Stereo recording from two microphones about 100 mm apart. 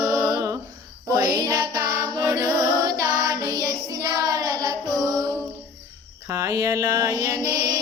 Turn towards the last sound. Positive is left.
turn(degrees=-35)  # may be behind; listen again after turning